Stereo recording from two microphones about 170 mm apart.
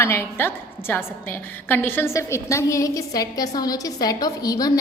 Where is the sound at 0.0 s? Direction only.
15° left (ahead or behind).